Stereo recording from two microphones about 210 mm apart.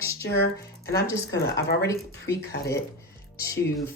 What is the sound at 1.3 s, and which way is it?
Speech, 50° left (ahead or behind).